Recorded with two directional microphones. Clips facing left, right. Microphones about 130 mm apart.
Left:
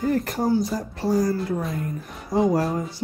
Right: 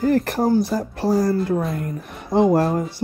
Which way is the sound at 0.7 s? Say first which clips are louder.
Right 5 dB; 55° right (ahead or behind).